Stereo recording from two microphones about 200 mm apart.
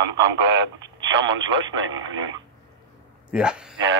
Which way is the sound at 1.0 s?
70° right (ahead or behind).